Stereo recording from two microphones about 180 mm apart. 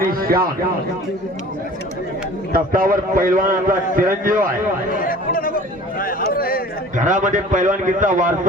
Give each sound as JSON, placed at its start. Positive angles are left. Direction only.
{"t": 0.1, "sound": "a man's voice", "side_deg": -55}
{"t": 2.5, "sound": "a man's voice", "side_deg": -50}
{"t": 5.0, "sound": "chatter", "side_deg": 50}
{"t": 6.0, "sound": "speech", "side_deg": 55}
{"t": 6.3, "sound": "a sound", "side_deg": 55}
{"t": 6.9, "sound": "a man's voice", "side_deg": -45}